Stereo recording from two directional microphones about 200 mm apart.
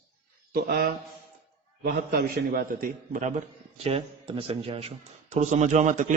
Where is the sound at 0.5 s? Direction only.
50° right (ahead or behind).